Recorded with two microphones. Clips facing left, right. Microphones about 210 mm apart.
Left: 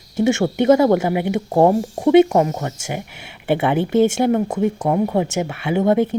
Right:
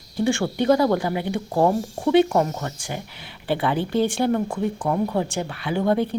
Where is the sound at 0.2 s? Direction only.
20° left (ahead or behind).